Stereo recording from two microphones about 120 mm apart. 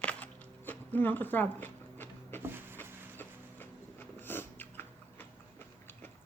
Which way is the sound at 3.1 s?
15° left (ahead or behind).